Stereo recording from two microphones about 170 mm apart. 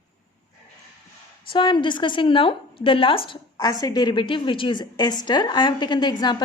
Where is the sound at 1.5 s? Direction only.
30° left (ahead or behind).